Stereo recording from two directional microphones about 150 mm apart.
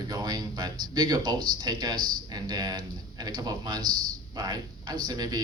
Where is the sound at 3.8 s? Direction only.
70° right (ahead or behind).